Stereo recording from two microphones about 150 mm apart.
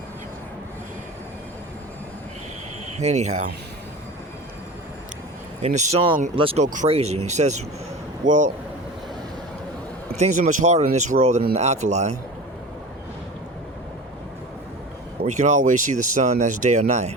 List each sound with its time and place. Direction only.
3.0 s speech: 50° right (ahead or behind)
5.6 s speech: 50° right (ahead or behind)
6.3 s speech: 40° right (ahead or behind); by 8.5 s 55° right (ahead or behind)
10.2 s speech: 50° right (ahead or behind)
15.2 s speech: 50° right (ahead or behind)